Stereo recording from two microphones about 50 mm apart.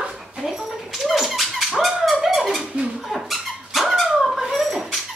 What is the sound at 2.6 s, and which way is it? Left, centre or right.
Squeak, right.